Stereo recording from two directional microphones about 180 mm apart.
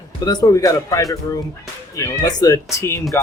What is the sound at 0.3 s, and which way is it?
Speech, 20° left (ahead or behind).